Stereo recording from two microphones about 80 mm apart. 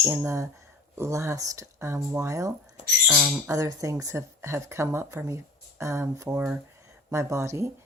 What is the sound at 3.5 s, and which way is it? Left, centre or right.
A woman's voice, right.